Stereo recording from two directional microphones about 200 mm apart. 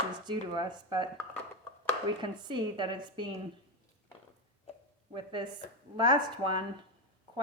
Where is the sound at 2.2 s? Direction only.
20° right (ahead or behind).